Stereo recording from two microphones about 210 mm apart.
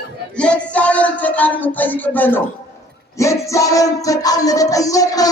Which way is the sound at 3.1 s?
15° left (ahead or behind).